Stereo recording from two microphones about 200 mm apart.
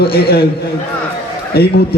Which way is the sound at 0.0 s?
50° left (ahead or behind).